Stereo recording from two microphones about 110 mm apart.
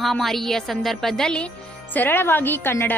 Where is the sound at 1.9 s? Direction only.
20° left (ahead or behind).